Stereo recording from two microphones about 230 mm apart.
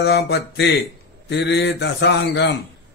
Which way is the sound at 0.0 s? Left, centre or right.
Left.